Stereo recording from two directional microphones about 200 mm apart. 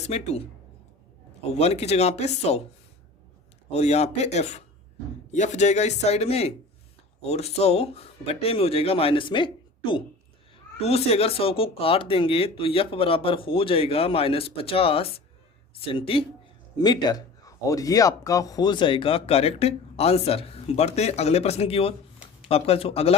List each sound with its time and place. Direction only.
0.0 s a man's voice: 35° left (ahead or behind)
1.5 s a man's voice: 30° left (ahead or behind)
3.7 s a man's voice: 35° left (ahead or behind)